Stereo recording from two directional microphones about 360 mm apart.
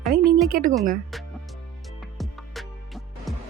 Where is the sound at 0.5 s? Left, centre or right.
Right.